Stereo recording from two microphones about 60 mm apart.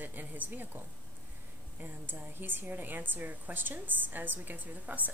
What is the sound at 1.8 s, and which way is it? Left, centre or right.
A woman's voice, right.